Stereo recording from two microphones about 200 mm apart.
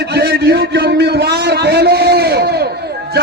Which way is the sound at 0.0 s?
55° right (ahead or behind).